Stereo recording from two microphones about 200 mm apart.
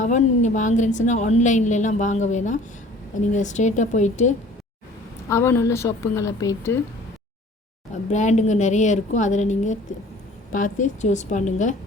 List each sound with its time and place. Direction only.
0.0 s a woman's voice: 35° left (ahead or behind)
5.3 s a woman's voice: 15° left (ahead or behind)
8.1 s a woman's voice: 35° left (ahead or behind)